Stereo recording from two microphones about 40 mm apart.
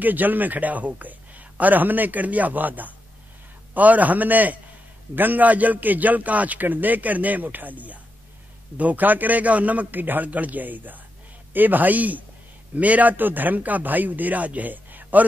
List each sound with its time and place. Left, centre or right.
0.0 s a man's voice: right
13.1 s a man's voice: right